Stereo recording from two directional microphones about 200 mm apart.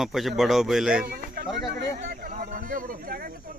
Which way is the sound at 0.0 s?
Centre (ahead or behind).